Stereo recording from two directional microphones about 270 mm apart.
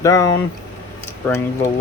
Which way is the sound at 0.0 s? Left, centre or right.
Centre.